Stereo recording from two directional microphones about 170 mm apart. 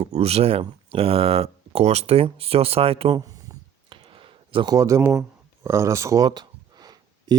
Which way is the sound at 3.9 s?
30° right (ahead or behind).